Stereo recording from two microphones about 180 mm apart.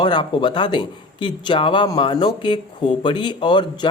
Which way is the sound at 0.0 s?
25° left (ahead or behind).